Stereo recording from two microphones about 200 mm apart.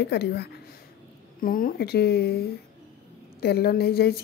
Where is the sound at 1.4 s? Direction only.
45° left (ahead or behind).